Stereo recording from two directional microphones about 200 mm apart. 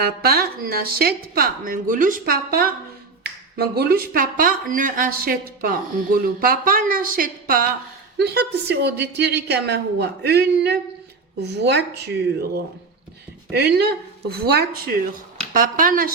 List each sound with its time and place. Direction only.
0.0 s a woman's voice: 50° right (ahead or behind)